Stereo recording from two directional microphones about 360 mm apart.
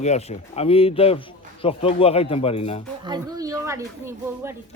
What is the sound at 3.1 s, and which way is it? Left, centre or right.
Speech, centre.